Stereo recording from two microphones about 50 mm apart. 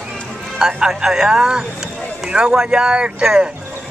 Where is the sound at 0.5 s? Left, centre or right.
Centre.